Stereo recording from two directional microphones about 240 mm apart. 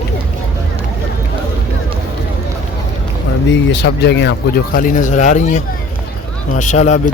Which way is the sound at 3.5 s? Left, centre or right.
Left.